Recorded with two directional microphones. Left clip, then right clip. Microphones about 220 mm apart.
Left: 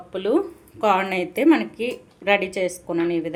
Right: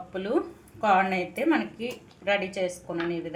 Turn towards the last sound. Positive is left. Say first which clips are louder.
# left 8 dB
turn(degrees=45)  # may be behind; listen again after turning